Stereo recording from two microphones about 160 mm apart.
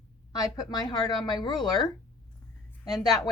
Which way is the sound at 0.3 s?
25° left (ahead or behind).